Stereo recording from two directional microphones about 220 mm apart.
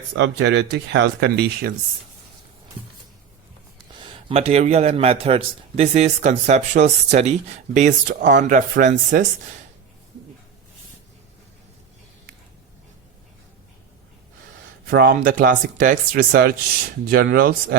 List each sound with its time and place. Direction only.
0.2 s speech: 50° right (ahead or behind)
4.0 s a man's voice: 25° right (ahead or behind)
14.8 s a man's voice: 45° right (ahead or behind)